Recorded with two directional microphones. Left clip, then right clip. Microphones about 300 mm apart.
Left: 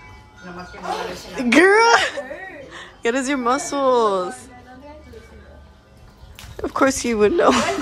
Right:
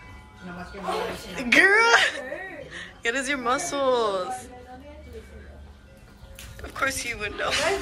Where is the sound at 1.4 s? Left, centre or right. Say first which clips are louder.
Left 4 dB; centre.